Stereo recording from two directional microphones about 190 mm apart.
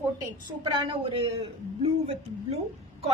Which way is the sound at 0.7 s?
25° right (ahead or behind).